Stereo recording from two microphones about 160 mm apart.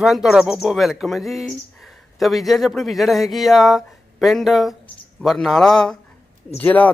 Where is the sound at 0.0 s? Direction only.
Centre (ahead or behind).